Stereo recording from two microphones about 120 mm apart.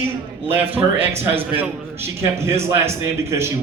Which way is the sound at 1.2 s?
15° right (ahead or behind).